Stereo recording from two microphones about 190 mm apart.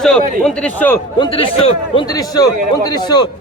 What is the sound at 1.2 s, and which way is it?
A man's voice, 30° left (ahead or behind).